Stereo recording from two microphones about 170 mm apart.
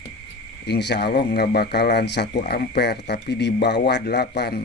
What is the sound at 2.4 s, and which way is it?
Speech, 70° left (ahead or behind).